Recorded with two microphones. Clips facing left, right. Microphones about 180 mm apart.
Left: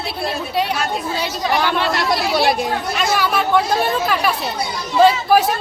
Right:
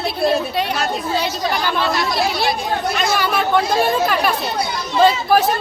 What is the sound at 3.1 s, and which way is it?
A woman's voice, centre (ahead or behind).